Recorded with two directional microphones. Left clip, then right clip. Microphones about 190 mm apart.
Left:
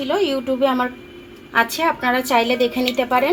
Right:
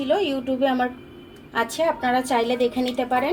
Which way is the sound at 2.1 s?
45° left (ahead or behind).